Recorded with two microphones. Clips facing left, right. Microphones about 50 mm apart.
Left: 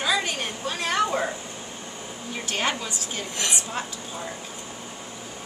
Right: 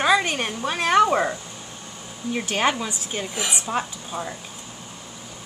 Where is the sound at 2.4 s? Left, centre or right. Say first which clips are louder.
Right 4 dB; centre.